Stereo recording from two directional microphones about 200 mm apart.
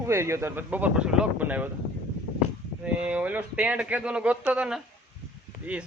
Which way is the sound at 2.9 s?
5° right (ahead or behind).